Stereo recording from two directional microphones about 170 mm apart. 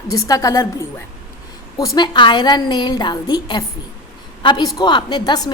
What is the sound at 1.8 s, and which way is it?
A woman's voice, 20° left (ahead or behind).